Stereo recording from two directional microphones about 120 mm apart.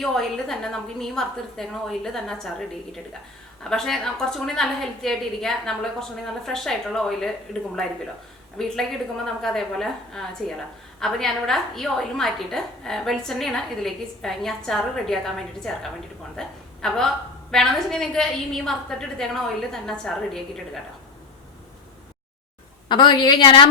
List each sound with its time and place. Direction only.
0.0 s a woman's voice: 5° left (ahead or behind)
22.9 s a woman's voice: 40° left (ahead or behind)